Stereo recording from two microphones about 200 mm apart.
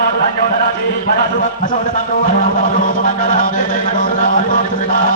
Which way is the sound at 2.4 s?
45° left (ahead or behind).